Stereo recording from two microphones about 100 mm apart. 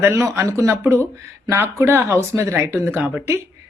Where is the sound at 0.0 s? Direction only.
25° right (ahead or behind).